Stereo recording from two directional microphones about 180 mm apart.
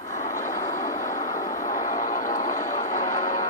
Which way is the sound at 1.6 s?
45° left (ahead or behind).